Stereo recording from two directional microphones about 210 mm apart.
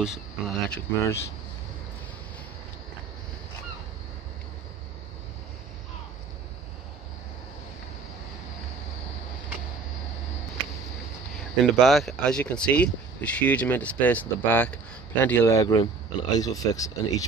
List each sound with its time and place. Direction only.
0.0 s speech: centre (ahead or behind)
11.6 s speech: centre (ahead or behind); by 17.2 s 15° left (ahead or behind)